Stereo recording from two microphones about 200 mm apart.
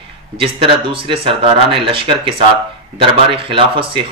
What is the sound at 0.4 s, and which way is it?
Speech, 25° right (ahead or behind).